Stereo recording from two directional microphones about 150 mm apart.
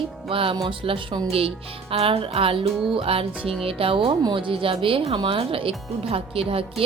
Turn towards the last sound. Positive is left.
turn(degrees=-40)  # may be behind; listen again after turning